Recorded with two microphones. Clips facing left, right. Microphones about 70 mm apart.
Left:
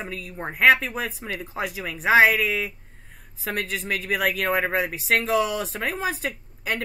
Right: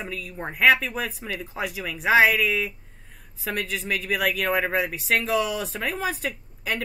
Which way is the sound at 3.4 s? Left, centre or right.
Left.